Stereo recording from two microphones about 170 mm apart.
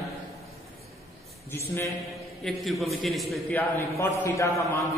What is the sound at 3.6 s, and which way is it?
A man's voice, 10° left (ahead or behind).